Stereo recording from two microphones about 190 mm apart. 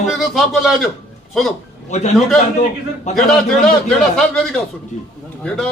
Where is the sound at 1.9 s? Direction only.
40° left (ahead or behind).